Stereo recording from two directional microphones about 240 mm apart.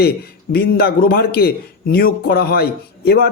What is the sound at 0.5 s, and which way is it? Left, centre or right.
A man's voice, left.